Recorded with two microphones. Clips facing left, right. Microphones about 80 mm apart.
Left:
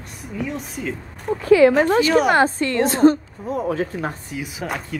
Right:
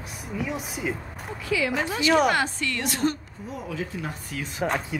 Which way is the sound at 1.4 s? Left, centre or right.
Left.